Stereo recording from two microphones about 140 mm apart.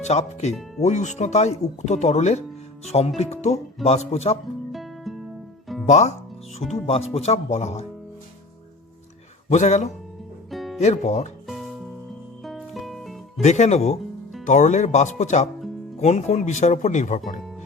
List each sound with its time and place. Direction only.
0.0 s speech: 55° left (ahead or behind)
4.7 s music: centre (ahead or behind)
5.8 s speech: 55° left (ahead or behind)
9.5 s speech: 55° left (ahead or behind)
10.5 s music: centre (ahead or behind)
10.8 s speech: 55° left (ahead or behind)
12.4 s music: centre (ahead or behind)
13.4 s speech: 50° left (ahead or behind)